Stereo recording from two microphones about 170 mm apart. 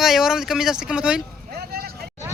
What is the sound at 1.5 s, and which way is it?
Vehicle, 65° right (ahead or behind).